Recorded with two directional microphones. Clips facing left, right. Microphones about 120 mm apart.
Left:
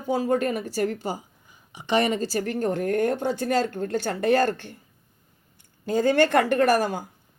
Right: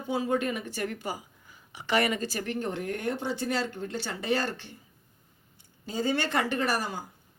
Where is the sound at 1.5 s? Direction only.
20° left (ahead or behind); by 4.7 s 50° left (ahead or behind).